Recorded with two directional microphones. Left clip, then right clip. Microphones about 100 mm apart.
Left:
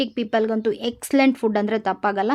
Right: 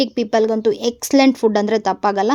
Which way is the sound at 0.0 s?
35° right (ahead or behind).